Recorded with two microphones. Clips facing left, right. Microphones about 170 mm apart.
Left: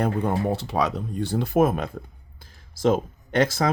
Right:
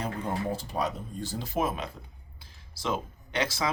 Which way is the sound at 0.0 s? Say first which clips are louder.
Left 8 dB; 60° left (ahead or behind).